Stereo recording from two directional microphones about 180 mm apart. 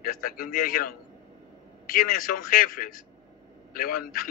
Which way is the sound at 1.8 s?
50° left (ahead or behind).